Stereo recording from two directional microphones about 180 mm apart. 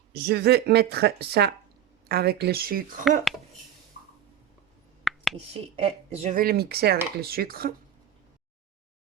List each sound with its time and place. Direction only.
0.1 s speech: 60° right (ahead or behind)
3.3 s speech: centre (ahead or behind)
5.0 s finger snapping: centre (ahead or behind)
5.7 s speech: 35° right (ahead or behind)
6.3 s speech: 55° right (ahead or behind)